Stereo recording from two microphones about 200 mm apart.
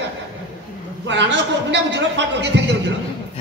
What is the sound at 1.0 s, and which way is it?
A man's voice, 60° right (ahead or behind).